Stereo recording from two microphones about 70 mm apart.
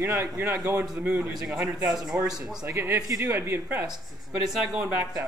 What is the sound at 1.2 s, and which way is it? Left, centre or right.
A man's voice, centre.